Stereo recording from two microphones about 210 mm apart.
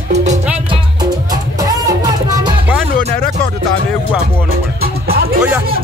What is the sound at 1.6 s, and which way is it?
Music, 15° right (ahead or behind).